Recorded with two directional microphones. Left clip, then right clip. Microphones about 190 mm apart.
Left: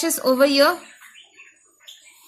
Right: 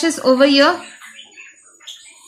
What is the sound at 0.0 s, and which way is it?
Speech, 25° left (ahead or behind).